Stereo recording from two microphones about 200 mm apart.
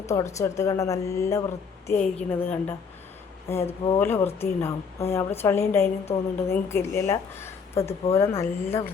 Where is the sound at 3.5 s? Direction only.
15° left (ahead or behind).